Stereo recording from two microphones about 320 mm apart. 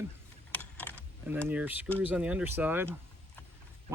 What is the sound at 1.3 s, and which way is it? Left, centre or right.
Speech, centre.